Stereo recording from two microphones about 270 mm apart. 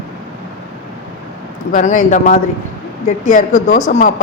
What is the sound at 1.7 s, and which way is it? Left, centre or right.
A man's voice, left.